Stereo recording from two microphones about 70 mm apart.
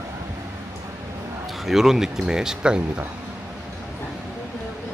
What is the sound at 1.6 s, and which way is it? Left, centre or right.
Speech, centre.